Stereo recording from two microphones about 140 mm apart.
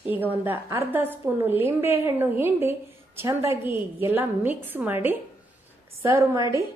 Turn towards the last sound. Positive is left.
turn(degrees=-20)  # may be behind; listen again after turning